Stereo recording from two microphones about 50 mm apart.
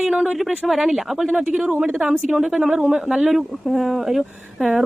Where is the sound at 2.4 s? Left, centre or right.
Centre.